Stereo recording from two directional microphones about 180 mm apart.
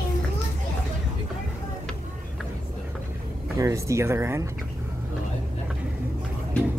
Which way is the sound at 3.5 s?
15° right (ahead or behind).